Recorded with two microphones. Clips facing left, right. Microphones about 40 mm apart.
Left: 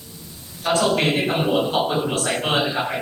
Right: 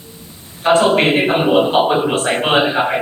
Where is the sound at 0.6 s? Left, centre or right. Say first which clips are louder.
Right 7 dB; right.